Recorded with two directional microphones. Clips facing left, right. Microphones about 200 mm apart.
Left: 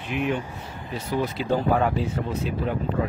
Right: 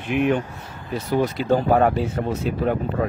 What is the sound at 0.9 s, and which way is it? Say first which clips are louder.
Speech: right 5 dB; 45° right (ahead or behind).